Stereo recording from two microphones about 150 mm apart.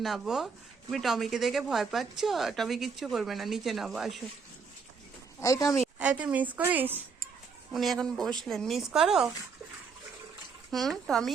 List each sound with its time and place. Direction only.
0.0 s speech: centre (ahead or behind)
5.4 s speech: 20° left (ahead or behind)
6.0 s a woman's voice: 5° right (ahead or behind)
7.7 s speech: centre (ahead or behind)
10.7 s speech: centre (ahead or behind)